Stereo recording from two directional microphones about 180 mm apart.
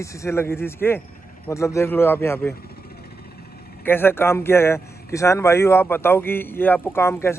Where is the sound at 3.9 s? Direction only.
10° left (ahead or behind).